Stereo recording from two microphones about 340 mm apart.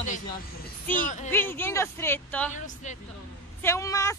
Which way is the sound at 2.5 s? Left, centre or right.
Left.